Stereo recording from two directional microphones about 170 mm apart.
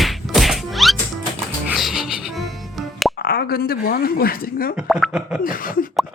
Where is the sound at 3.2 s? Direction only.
65° left (ahead or behind).